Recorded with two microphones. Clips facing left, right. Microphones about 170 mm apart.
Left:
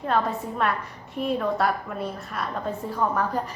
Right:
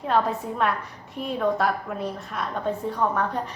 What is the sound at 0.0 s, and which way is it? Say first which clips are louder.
A woman's voice: right 1 dB; centre (ahead or behind).